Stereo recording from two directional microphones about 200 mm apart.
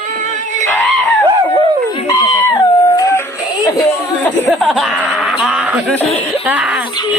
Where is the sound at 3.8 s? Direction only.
Centre (ahead or behind).